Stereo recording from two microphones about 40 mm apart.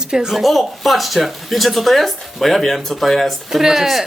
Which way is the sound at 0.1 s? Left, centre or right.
Centre.